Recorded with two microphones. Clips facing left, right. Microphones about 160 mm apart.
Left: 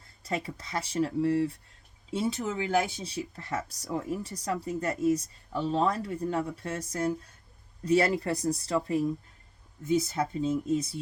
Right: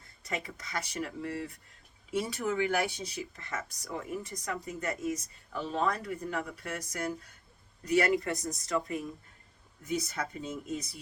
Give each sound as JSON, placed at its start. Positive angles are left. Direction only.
{"t": 0.3, "sound": "speech", "side_deg": 30}